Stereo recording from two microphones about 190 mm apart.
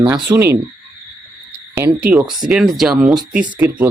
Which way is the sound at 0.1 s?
15° right (ahead or behind).